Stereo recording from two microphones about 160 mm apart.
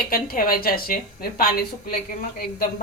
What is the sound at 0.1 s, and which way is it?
A woman's voice, 65° left (ahead or behind).